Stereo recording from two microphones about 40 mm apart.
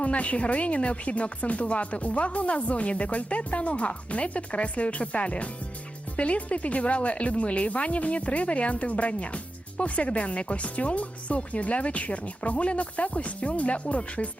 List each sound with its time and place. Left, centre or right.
0.0 s speech: left